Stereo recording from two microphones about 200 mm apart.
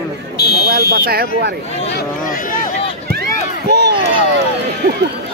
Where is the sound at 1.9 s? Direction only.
40° left (ahead or behind).